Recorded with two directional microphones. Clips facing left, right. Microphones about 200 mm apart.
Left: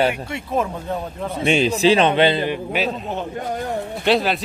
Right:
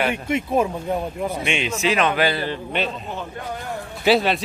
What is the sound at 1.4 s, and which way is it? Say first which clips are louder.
A man's voice: left 10 dB; 35° left (ahead or behind).